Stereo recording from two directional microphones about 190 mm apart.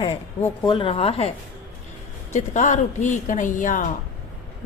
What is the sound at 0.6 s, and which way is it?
Speech, 25° left (ahead or behind).